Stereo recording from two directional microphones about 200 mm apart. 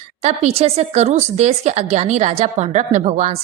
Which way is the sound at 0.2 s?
30° right (ahead or behind).